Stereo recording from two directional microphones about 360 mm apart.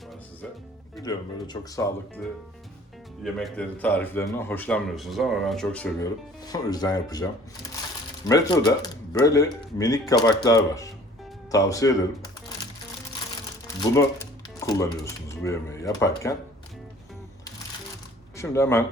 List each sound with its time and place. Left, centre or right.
1.0 s speech: centre
3.3 s a man's voice: centre
13.9 s speech: centre
18.3 s speech: centre